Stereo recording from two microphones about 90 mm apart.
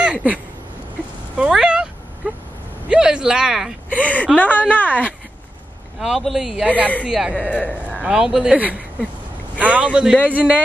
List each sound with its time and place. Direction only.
0.0 s a sound: 15° right (ahead or behind)
3.9 s a woman's voice: 15° left (ahead or behind)
5.9 s speech: 5° right (ahead or behind)
7.3 s a woman's voice: 15° left (ahead or behind)
8.0 s speech: 10° right (ahead or behind)